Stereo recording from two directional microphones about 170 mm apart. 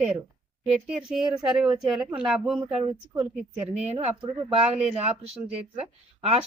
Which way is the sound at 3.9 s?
30° right (ahead or behind).